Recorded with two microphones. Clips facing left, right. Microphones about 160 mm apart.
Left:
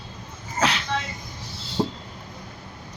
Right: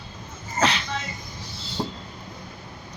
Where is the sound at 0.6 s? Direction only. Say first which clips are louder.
Even; 5° left (ahead or behind).